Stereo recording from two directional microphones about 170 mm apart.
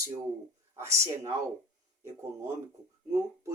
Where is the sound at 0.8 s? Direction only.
15° right (ahead or behind).